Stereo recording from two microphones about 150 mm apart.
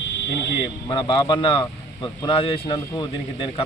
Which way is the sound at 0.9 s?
30° left (ahead or behind).